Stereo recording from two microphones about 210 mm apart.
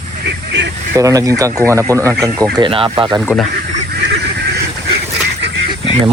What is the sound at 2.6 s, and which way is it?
Speech, 25° right (ahead or behind).